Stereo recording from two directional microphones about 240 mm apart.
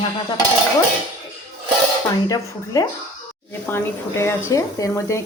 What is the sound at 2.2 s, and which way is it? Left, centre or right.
Speech, centre.